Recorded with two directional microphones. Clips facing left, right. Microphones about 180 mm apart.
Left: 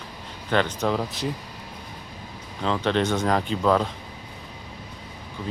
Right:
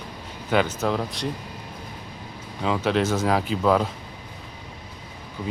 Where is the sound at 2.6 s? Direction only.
5° right (ahead or behind).